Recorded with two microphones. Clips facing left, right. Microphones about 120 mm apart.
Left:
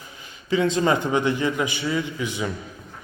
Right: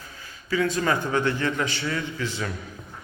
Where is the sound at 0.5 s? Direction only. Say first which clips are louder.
Left 3 dB; 25° left (ahead or behind).